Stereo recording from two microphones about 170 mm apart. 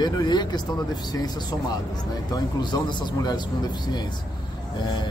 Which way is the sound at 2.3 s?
25° left (ahead or behind).